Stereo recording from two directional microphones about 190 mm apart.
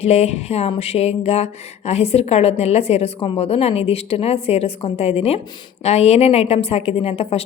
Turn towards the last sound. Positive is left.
turn(degrees=30)  # may be behind; listen again after turning